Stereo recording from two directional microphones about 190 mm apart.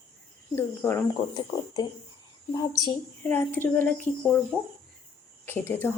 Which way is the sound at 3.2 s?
10° left (ahead or behind).